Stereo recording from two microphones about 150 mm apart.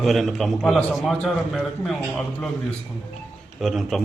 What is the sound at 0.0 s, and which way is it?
A man's voice, centre (ahead or behind).